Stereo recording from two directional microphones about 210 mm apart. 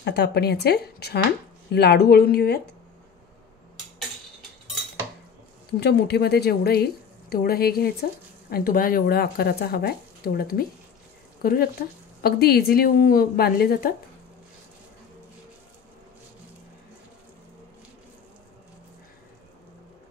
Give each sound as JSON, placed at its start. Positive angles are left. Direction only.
{"t": 0.0, "sound": "a woman's voice", "side_deg": 50}
{"t": 5.8, "sound": "a woman's voice", "side_deg": 50}